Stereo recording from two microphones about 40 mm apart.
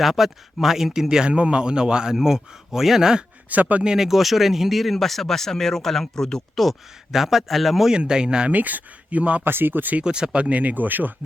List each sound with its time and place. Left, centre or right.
0.0 s speech: centre
1.0 s speech: right
3.5 s speech: right
3.8 s speech: centre
6.6 s speech: centre
7.9 s speech: right
8.5 s speech: right
9.4 s speech: right
10.0 s speech: right